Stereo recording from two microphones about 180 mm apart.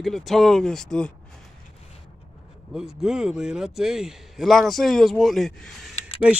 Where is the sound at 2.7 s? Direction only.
5° right (ahead or behind).